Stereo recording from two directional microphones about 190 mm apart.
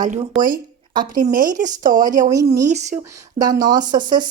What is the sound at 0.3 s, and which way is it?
Speech, 45° right (ahead or behind).